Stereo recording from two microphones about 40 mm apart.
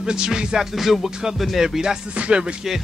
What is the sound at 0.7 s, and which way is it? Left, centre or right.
Speech, centre.